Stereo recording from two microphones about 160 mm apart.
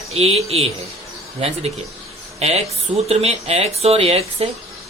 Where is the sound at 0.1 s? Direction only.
40° right (ahead or behind).